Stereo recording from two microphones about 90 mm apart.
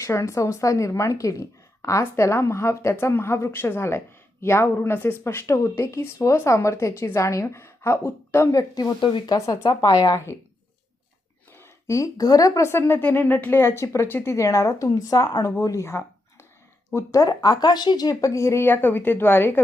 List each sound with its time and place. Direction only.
0.0 s a woman's voice: 35° left (ahead or behind)
8.5 s speech: 45° left (ahead or behind)
9.0 s speech: 65° left (ahead or behind)
9.3 s a woman's voice: 40° left (ahead or behind)
11.5 s a woman's voice: 30° left (ahead or behind)
16.9 s a woman's voice: 40° left (ahead or behind)